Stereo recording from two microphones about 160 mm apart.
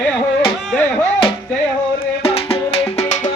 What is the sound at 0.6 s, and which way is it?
Music, 5° left (ahead or behind).